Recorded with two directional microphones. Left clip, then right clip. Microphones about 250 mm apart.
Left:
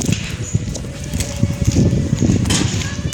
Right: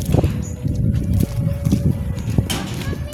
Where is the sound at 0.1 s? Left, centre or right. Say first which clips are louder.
Right 4 dB; right.